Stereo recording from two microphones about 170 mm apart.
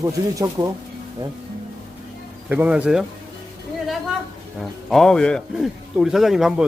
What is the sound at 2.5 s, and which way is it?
Speech, 10° right (ahead or behind).